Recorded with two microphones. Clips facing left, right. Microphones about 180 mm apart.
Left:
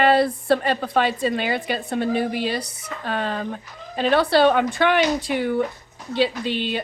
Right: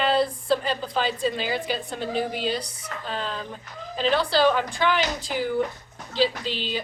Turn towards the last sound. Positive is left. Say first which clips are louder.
# left 5 dB
turn(degrees=60)  # may be behind; listen again after turning